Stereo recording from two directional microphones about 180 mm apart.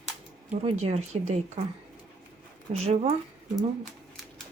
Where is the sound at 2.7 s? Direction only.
35° right (ahead or behind).